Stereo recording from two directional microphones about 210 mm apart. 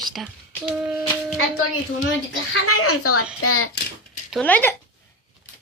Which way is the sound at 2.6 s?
90° left.